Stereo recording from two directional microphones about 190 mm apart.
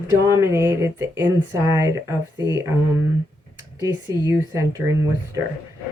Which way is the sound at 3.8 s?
20° right (ahead or behind).